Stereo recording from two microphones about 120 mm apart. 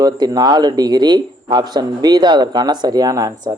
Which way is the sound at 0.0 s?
35° right (ahead or behind).